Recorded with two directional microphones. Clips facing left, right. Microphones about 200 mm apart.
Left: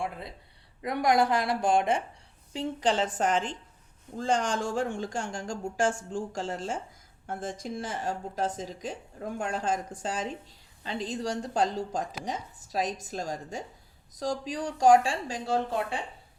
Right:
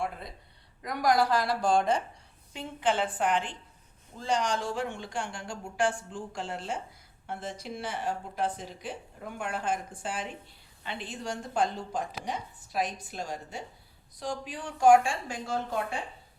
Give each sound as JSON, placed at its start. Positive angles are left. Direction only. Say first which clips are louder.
{"t": 0.0, "sound": "a woman's voice", "louder": "even", "side_deg": 25}
{"t": 2.5, "sound": "speech", "louder": "left 2 dB", "side_deg": 35}